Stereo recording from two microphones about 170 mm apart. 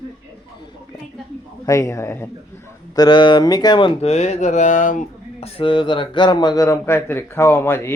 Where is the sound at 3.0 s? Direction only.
25° left (ahead or behind).